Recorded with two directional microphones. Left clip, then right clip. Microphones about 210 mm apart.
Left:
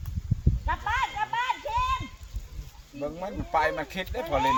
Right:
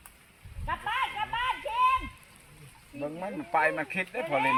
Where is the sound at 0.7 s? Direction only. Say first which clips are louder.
Left 2 dB; 40° left (ahead or behind).